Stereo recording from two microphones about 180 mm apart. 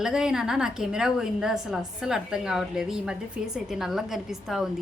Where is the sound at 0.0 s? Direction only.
5° right (ahead or behind).